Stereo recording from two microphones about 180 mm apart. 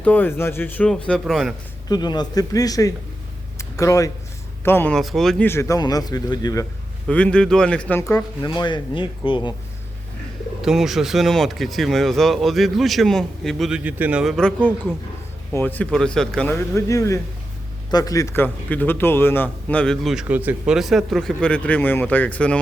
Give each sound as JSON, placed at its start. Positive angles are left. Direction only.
{"t": 0.0, "sound": "a man's voice", "side_deg": 10}
{"t": 1.9, "sound": "a man's voice", "side_deg": 25}
{"t": 4.9, "sound": "speech", "side_deg": 0}
{"t": 5.5, "sound": "speech", "side_deg": 15}
{"t": 7.1, "sound": "a man's voice", "side_deg": 5}
{"t": 10.6, "sound": "a man's voice", "side_deg": 0}